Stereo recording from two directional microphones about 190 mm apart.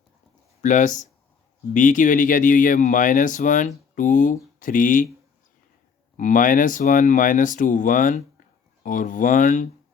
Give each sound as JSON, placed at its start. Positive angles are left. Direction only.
{"t": 0.6, "sound": "speech", "side_deg": 40}
{"t": 6.1, "sound": "speech", "side_deg": 45}